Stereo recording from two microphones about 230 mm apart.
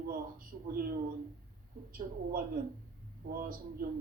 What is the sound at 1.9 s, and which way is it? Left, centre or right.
A man's voice, right.